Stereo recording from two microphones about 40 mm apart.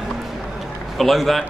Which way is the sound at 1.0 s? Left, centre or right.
Centre.